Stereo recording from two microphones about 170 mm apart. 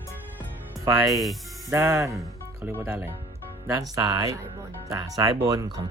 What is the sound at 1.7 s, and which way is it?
Speech, 15° right (ahead or behind).